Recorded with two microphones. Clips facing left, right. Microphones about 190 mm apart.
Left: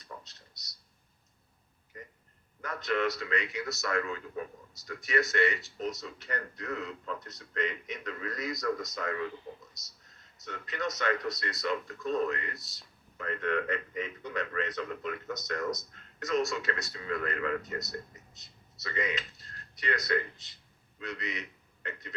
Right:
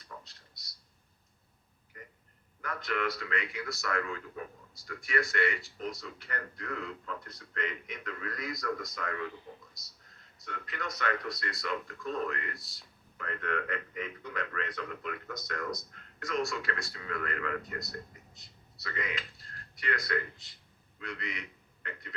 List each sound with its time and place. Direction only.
0.0 s a sound: 20° left (ahead or behind)
2.6 s a man's voice: 20° left (ahead or behind)
10.4 s a man's voice: 20° left (ahead or behind)